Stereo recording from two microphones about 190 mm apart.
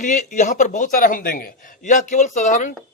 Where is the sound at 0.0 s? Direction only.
40° left (ahead or behind).